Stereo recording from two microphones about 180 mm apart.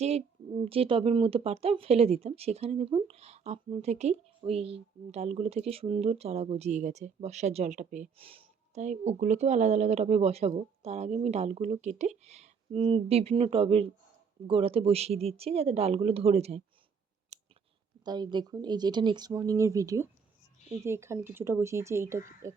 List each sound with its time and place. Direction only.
0.6 s speech: 30° right (ahead or behind)
8.2 s speech: 30° right (ahead or behind)
18.0 s speech: 25° right (ahead or behind)